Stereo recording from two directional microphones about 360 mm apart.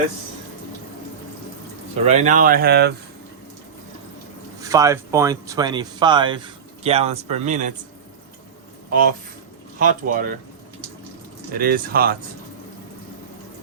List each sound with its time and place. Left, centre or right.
2.0 s speech: centre
4.6 s speech: centre
8.9 s speech: right
11.5 s speech: right